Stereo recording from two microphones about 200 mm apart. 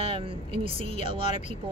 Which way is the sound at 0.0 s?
25° right (ahead or behind).